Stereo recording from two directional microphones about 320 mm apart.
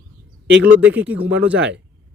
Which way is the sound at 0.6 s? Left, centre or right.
Centre.